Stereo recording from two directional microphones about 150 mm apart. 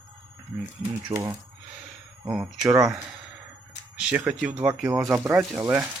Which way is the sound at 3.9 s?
10° right (ahead or behind).